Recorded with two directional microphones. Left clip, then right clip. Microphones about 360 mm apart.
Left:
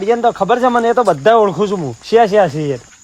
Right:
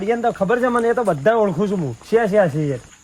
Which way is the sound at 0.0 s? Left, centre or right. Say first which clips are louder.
Left 6 dB; centre.